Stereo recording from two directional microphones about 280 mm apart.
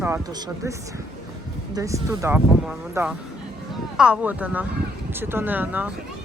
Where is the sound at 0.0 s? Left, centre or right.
Centre.